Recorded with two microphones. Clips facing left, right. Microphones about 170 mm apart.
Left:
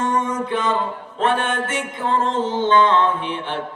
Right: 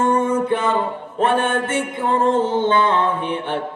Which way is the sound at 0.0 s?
50° right (ahead or behind).